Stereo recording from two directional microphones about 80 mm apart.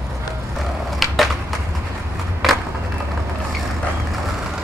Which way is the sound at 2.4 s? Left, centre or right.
Centre.